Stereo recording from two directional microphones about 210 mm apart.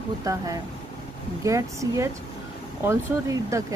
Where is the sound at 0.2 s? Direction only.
15° right (ahead or behind).